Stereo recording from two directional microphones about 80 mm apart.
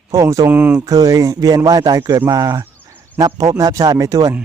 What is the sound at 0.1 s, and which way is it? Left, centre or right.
Speech, right.